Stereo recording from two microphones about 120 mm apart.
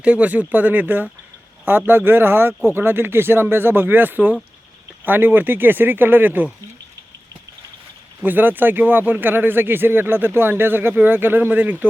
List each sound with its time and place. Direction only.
0.0 s speech: 10° right (ahead or behind)
8.2 s speech: 15° right (ahead or behind)